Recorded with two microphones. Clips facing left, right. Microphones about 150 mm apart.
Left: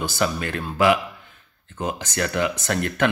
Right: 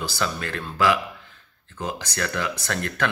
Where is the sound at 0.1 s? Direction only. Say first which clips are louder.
Left 4 dB; 20° left (ahead or behind).